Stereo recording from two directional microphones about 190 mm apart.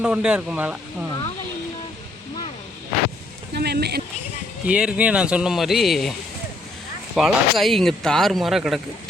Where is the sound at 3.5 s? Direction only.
60° right (ahead or behind).